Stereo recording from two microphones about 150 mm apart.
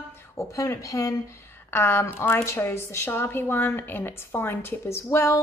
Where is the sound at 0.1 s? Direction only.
20° left (ahead or behind).